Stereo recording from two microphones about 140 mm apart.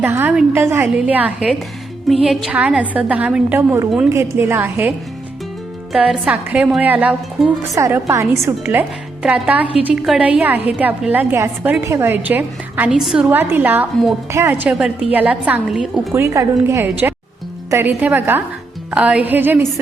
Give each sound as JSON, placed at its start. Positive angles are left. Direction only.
{"t": 0.0, "sound": "a woman's voice", "side_deg": -15}
{"t": 5.9, "sound": "a woman's voice", "side_deg": -5}
{"t": 7.3, "sound": "a woman's voice", "side_deg": 0}
{"t": 7.8, "sound": "a woman's voice", "side_deg": -20}
{"t": 13.0, "sound": "a woman's voice", "side_deg": 0}
{"t": 13.2, "sound": "a woman's voice", "side_deg": -15}
{"t": 14.7, "sound": "a woman's voice", "side_deg": -5}
{"t": 16.1, "sound": "a woman's voice", "side_deg": -20}